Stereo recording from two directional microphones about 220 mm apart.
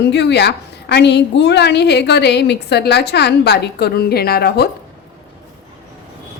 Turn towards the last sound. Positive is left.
turn(degrees=45)  # may be behind; listen again after turning